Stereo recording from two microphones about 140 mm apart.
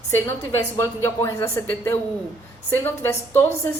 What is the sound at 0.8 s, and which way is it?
A woman's voice, 20° left (ahead or behind).